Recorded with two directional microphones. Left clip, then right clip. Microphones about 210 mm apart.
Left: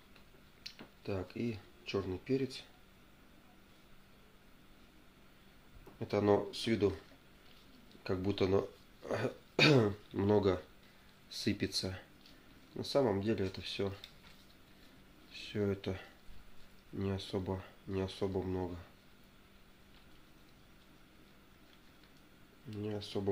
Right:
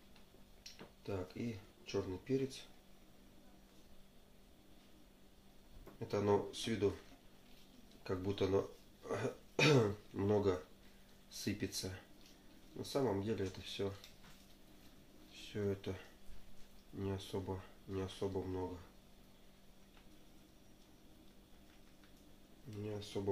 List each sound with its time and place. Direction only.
1.0 s speech: 55° left (ahead or behind)
5.9 s speech: 50° left (ahead or behind)
8.0 s speech: 50° left (ahead or behind)
15.3 s speech: 55° left (ahead or behind)
17.0 s speech: 50° left (ahead or behind)
22.7 s speech: 50° left (ahead or behind)